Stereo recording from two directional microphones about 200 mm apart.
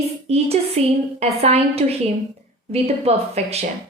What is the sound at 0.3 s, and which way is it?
A woman's voice, 30° right (ahead or behind).